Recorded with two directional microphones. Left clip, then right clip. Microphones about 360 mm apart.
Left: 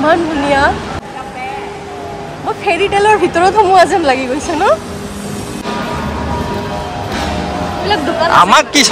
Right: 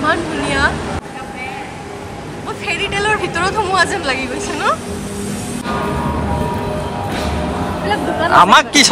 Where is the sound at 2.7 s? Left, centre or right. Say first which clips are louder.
Left 6 dB; left.